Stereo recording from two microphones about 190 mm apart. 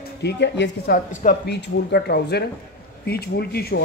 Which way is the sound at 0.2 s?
60° left (ahead or behind).